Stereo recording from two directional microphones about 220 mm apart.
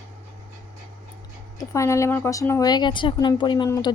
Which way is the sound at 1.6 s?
15° left (ahead or behind).